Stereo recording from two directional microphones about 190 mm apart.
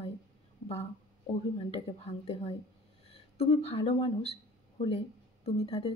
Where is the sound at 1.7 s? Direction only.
30° left (ahead or behind).